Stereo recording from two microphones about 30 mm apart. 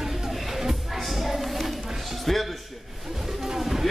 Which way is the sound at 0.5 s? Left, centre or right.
Centre.